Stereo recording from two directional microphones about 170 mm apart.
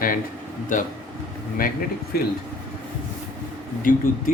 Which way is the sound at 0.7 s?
50° left (ahead or behind).